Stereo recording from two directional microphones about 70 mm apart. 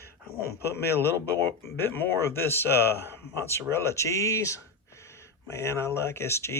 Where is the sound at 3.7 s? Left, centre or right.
Left.